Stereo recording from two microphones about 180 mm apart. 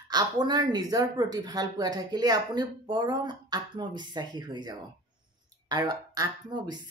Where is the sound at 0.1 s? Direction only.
25° right (ahead or behind).